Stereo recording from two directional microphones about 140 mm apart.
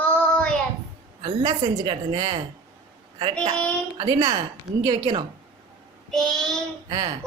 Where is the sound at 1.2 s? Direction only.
40° right (ahead or behind).